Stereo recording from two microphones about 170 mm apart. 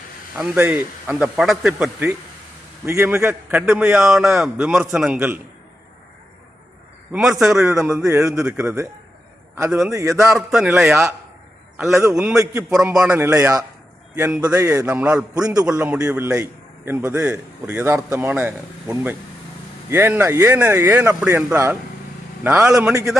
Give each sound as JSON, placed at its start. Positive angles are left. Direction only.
{"t": 0.3, "sound": "a man's voice", "side_deg": -10}
{"t": 7.1, "sound": "a man's voice", "side_deg": 0}
{"t": 7.9, "sound": "a man's voice", "side_deg": -15}
{"t": 9.6, "sound": "a man's voice", "side_deg": -5}
{"t": 9.9, "sound": "a man's voice", "side_deg": -15}
{"t": 10.5, "sound": "a man's voice", "side_deg": -5}